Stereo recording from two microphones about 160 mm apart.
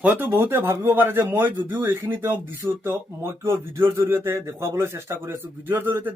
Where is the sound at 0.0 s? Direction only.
10° right (ahead or behind).